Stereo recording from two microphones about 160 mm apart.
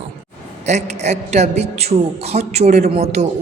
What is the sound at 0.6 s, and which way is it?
Speech, 45° right (ahead or behind).